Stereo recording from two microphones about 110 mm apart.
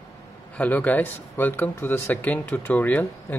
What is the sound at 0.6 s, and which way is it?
Speech, 15° left (ahead or behind).